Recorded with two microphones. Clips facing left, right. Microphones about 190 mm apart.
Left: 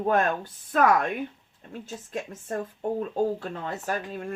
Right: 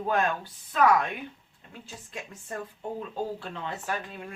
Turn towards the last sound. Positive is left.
turn(degrees=40)  # may be behind; listen again after turning